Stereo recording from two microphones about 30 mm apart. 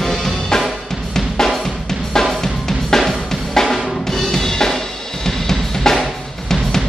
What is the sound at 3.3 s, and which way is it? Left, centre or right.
Drum kit, centre.